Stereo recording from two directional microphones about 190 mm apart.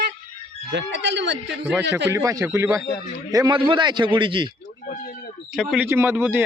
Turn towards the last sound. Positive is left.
turn(degrees=-10)  # may be behind; listen again after turning